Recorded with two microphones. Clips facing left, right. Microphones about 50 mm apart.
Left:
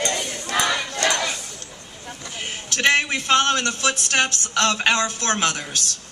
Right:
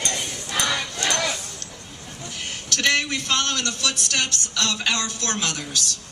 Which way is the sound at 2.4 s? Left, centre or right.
Left.